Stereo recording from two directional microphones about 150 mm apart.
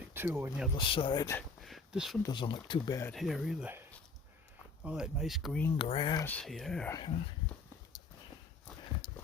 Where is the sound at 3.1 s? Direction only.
Centre (ahead or behind).